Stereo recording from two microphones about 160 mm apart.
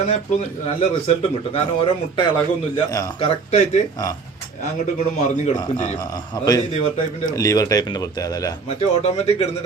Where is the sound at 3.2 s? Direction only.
45° left (ahead or behind).